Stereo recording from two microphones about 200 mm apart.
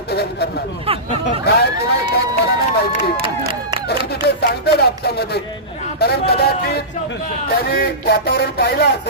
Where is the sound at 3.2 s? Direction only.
25° right (ahead or behind).